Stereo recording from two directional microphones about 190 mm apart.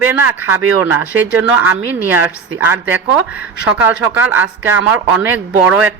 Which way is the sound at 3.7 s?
10° right (ahead or behind).